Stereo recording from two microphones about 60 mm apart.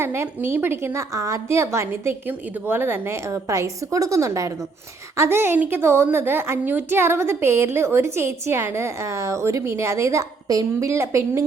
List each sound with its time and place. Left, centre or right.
0.0 s a woman's voice: right
3.2 s a woman's voice: right
5.1 s a woman's voice: right
10.8 s a woman's voice: right